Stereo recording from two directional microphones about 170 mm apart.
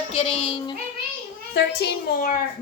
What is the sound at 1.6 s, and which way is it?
Speech, 70° left (ahead or behind).